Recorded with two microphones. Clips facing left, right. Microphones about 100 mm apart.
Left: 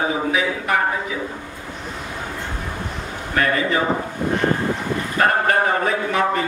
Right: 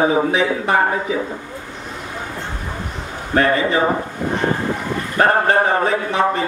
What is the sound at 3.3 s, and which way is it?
Speech, 30° right (ahead or behind).